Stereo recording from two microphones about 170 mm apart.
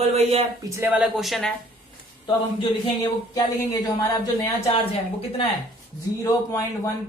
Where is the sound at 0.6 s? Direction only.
15° right (ahead or behind).